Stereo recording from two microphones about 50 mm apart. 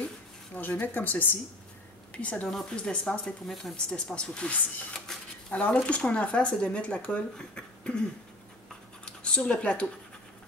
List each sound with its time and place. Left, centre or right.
0.6 s speech: left
2.1 s speech: left
4.9 s a sound: centre
5.5 s speech: left; by 8.0 s centre
9.0 s scratch: left